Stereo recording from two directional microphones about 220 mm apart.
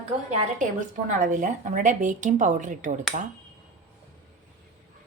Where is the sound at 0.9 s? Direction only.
35° right (ahead or behind).